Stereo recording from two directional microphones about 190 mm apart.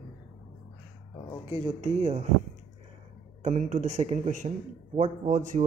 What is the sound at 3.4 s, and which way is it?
Speech, 45° right (ahead or behind).